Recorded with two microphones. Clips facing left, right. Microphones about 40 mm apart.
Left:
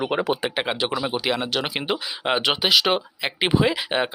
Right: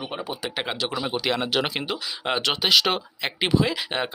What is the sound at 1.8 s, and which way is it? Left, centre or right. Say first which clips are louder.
Speech: left 3 dB; left.